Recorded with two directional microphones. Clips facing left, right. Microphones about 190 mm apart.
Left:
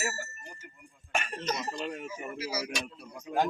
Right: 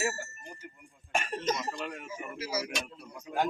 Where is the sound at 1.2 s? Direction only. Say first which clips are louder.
Right 2 dB; 45° right (ahead or behind).